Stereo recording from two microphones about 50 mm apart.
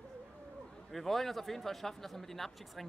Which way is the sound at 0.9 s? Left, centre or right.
Centre.